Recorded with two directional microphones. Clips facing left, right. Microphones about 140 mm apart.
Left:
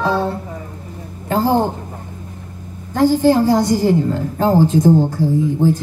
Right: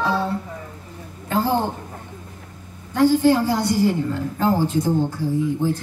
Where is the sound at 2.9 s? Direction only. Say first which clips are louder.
Left 3 dB; 40° left (ahead or behind).